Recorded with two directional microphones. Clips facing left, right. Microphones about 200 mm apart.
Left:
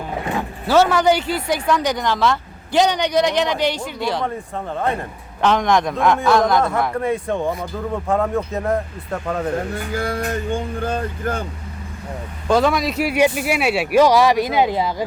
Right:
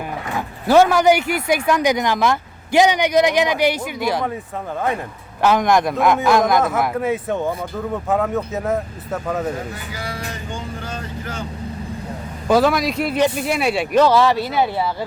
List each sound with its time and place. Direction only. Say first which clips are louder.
0.7 s speech: right 2 dB; 10° right (ahead or behind)
5.4 s speech: right 1 dB; 10° right (ahead or behind)
9.7 s speech: left 7 dB; 55° left (ahead or behind)
12.5 s speech: right 1 dB; 5° right (ahead or behind); by 15.0 s 15° left (ahead or behind)